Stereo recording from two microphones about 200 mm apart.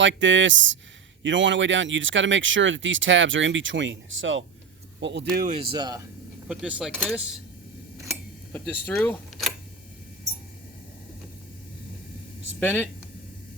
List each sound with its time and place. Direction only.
0.0 s speech: 65° right (ahead or behind)
4.9 s speech: 60° right (ahead or behind)
5.5 s speech: 20° right (ahead or behind)
6.5 s speech: 5° right (ahead or behind)
8.5 s speech: centre (ahead or behind)
12.5 s speech: 10° left (ahead or behind)